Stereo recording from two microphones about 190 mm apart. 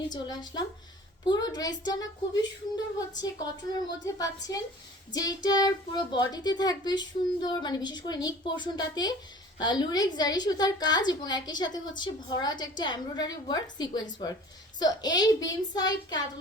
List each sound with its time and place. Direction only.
0.1 s a woman's voice: 20° left (ahead or behind)